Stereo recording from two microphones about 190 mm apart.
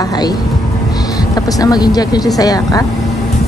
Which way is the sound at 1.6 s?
20° left (ahead or behind).